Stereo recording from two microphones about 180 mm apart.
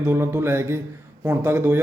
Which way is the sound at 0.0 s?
15° right (ahead or behind).